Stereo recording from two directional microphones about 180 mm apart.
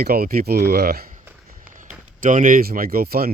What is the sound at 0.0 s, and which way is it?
Speech, 55° right (ahead or behind).